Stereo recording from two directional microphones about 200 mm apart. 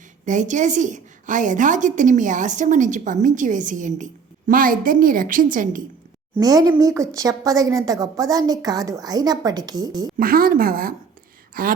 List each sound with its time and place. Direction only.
0.3 s a woman's voice: 40° right (ahead or behind)
6.3 s speech: 20° right (ahead or behind)
10.2 s a woman's voice: 45° right (ahead or behind)